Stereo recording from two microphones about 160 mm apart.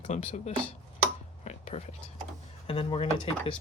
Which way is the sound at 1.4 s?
45° left (ahead or behind).